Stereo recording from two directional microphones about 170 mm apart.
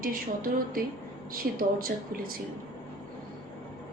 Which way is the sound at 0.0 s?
55° right (ahead or behind).